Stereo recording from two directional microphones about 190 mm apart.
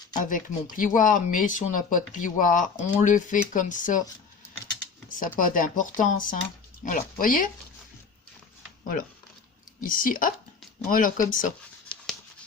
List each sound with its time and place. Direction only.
0.3 s speech: 45° left (ahead or behind)
5.4 s speech: 45° left (ahead or behind)
9.8 s speech: 45° left (ahead or behind)